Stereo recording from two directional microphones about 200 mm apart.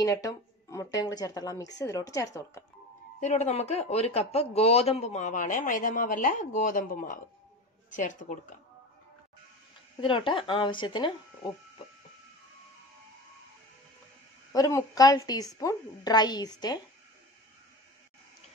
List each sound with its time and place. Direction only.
0.0 s speech: 15° left (ahead or behind)
3.2 s speech: 35° left (ahead or behind)
9.9 s speech: 25° left (ahead or behind)
14.5 s speech: 15° left (ahead or behind)